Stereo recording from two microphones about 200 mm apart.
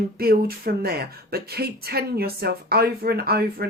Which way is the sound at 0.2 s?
50° right (ahead or behind).